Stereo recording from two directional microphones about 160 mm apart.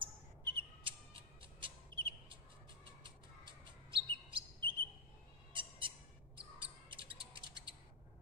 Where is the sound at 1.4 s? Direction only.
30° right (ahead or behind).